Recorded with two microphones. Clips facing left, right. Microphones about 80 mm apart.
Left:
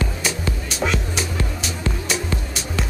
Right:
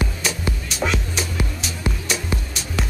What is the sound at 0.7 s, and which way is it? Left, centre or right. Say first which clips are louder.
Music: left 1 dB; centre.